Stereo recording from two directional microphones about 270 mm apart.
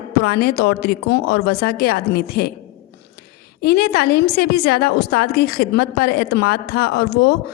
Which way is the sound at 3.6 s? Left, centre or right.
Left.